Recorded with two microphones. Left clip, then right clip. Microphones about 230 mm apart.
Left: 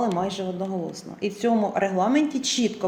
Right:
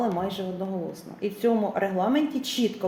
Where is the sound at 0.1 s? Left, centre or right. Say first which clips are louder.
Left 3 dB; left.